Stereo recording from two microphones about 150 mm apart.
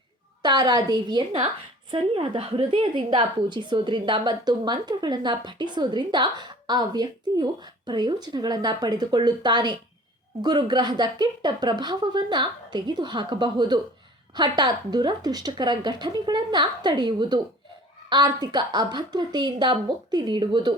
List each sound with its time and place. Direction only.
0.4 s a woman's voice: 25° right (ahead or behind)